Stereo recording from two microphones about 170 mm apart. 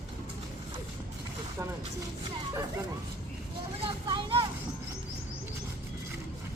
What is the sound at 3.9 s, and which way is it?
Vehicle, 30° right (ahead or behind).